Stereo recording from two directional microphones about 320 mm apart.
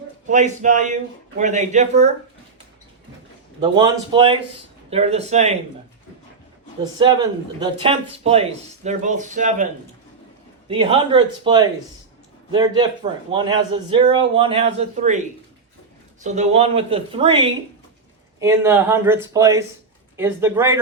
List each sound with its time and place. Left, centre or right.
0.3 s speech: right
3.6 s speech: centre
7.0 s speech: centre
10.7 s speech: centre
16.2 s speech: right